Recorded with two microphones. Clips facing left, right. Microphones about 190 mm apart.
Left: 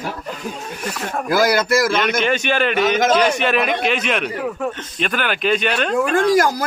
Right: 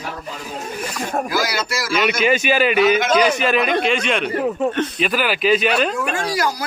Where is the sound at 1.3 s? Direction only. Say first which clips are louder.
Left 7 dB; 55° left (ahead or behind).